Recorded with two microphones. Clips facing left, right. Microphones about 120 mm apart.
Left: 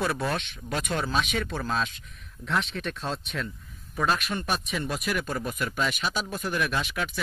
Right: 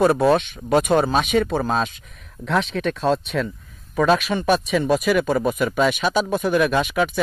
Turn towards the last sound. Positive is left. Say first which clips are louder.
# right 10 dB
turn(degrees=-55)  # may be behind; listen again after turning